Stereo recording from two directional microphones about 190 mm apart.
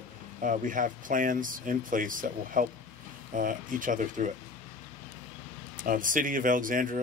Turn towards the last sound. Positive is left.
turn(degrees=-45)  # may be behind; listen again after turning